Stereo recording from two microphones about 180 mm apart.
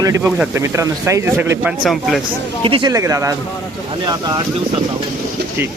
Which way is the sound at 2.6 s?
25° right (ahead or behind).